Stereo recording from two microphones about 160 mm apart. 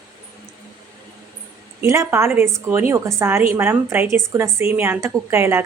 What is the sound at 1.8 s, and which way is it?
A woman's voice, 15° right (ahead or behind).